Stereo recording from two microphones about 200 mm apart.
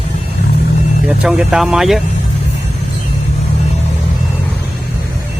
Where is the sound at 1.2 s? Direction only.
5° right (ahead or behind).